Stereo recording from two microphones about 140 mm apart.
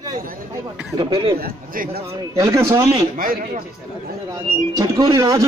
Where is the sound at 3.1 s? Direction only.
85° right.